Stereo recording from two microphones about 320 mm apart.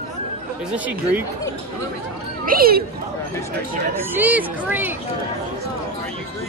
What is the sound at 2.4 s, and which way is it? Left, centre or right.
Speech, right.